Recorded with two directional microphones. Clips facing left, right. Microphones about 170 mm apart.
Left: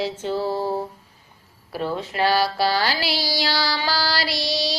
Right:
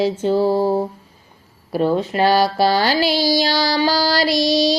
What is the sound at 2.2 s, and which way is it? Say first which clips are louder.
Speech: right 4 dB; 20° right (ahead or behind).